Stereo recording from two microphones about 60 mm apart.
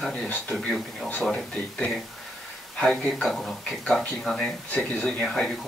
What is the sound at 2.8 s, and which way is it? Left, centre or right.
Speech, centre.